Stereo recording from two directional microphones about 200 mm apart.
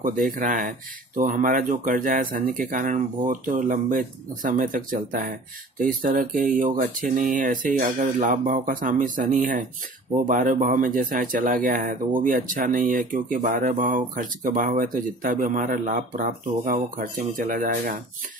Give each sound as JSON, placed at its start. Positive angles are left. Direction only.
{"t": 0.0, "sound": "speech", "side_deg": -40}